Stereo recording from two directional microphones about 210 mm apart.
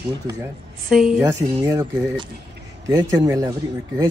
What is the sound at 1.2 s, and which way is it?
Speech, 15° right (ahead or behind).